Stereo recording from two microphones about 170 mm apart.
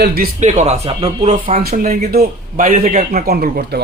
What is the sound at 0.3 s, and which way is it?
Speech, 45° right (ahead or behind).